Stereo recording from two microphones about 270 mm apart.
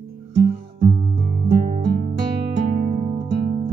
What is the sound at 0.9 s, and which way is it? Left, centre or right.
Music, right.